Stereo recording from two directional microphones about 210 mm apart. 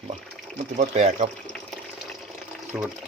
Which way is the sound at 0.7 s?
35° right (ahead or behind).